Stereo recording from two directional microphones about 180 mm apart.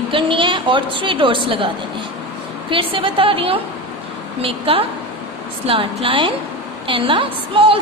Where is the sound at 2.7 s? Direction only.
30° right (ahead or behind).